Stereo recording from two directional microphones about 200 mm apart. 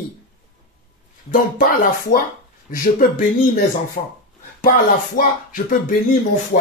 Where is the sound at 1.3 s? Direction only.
40° left (ahead or behind).